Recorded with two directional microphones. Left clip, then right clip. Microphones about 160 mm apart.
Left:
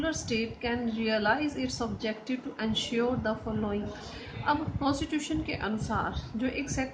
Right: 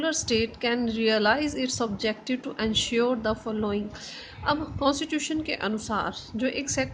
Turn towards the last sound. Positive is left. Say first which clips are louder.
# right 5 dB
turn(degrees=-55)  # may be behind; listen again after turning